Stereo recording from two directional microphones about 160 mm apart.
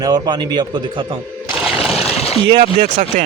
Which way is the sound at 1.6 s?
Centre (ahead or behind).